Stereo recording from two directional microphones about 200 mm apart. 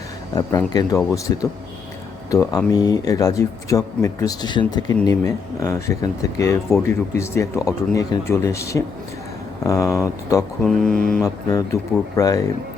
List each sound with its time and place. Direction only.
0.3 s speech: 20° left (ahead or behind)
10.7 s mantra: 5° left (ahead or behind)
11.4 s speech: 15° left (ahead or behind)